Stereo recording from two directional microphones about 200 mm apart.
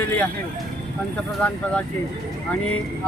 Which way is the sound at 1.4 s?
5° left (ahead or behind).